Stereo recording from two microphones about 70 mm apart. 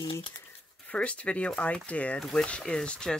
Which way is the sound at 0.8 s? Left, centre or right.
Centre.